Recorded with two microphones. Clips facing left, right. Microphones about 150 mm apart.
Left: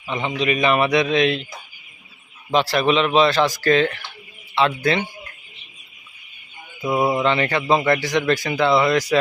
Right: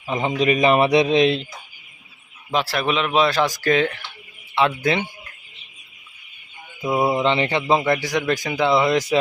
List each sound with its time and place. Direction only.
0.1 s a man's voice: 45° right (ahead or behind)
2.5 s speech: 5° right (ahead or behind)
6.8 s mantra: 5° right (ahead or behind)
7.2 s speech: 20° right (ahead or behind)